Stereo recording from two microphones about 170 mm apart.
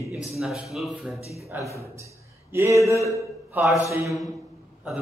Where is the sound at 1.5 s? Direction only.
15° right (ahead or behind).